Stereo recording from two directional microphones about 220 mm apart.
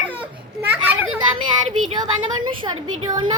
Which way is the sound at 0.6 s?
10° right (ahead or behind).